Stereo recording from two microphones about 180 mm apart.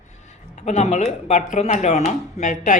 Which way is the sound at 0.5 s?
40° left (ahead or behind).